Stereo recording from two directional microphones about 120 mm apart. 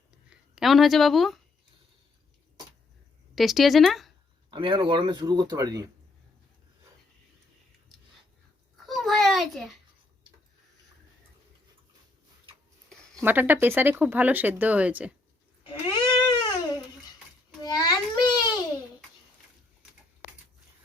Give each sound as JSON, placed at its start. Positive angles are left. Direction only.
{"t": 0.3, "sound": "a woman's voice", "side_deg": -5}
{"t": 3.3, "sound": "speech", "side_deg": 0}
{"t": 4.5, "sound": "speech", "side_deg": -45}
{"t": 8.9, "sound": "a sound", "side_deg": 0}
{"t": 13.2, "sound": "speech", "side_deg": -15}
{"t": 16.1, "sound": "a sound", "side_deg": 40}